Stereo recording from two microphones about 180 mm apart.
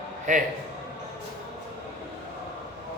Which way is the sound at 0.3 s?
45° right (ahead or behind).